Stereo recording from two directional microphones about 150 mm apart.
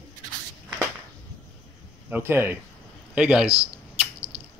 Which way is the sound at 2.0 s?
15° right (ahead or behind).